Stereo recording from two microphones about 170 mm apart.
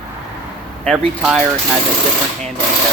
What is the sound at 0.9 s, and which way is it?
Speech, 5° right (ahead or behind).